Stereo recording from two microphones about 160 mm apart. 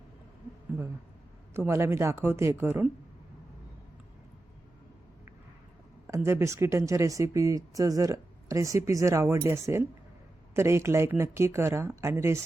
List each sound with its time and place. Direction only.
1.5 s speech: 15° right (ahead or behind)
6.2 s speech: 15° right (ahead or behind)